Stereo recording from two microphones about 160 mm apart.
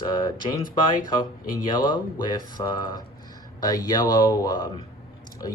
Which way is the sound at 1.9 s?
25° left (ahead or behind).